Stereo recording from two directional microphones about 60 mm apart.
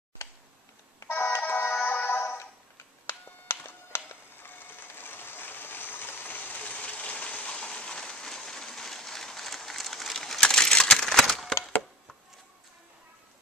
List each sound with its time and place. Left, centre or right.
1.0 s music: left; by 11.5 s centre